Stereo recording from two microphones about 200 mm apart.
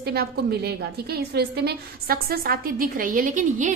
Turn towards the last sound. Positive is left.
turn(degrees=-40)  # may be behind; listen again after turning